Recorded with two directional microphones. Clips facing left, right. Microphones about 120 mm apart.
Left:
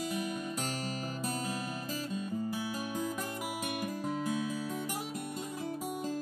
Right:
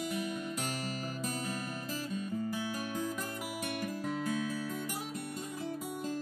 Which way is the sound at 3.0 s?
15° left (ahead or behind).